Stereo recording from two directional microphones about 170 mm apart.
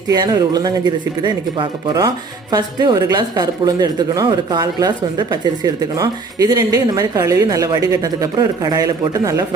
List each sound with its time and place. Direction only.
0.1 s speech: 25° right (ahead or behind)